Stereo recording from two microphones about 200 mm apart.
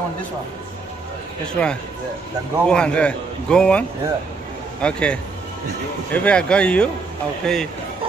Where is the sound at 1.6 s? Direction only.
5° left (ahead or behind).